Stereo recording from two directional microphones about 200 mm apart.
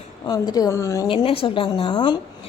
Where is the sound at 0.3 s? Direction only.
20° left (ahead or behind).